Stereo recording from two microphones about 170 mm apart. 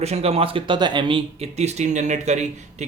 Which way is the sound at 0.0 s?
40° right (ahead or behind).